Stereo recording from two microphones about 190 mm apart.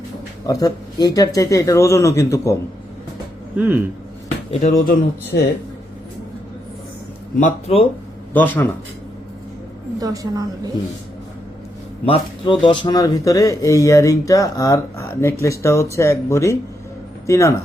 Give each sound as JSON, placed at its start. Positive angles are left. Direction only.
{"t": 0.4, "sound": "speech", "side_deg": 20}
{"t": 4.6, "sound": "speech", "side_deg": 45}
{"t": 7.3, "sound": "speech", "side_deg": 35}
{"t": 8.3, "sound": "a man's voice", "side_deg": 10}
{"t": 10.0, "sound": "a woman's voice", "side_deg": -20}
{"t": 12.0, "sound": "speech", "side_deg": 25}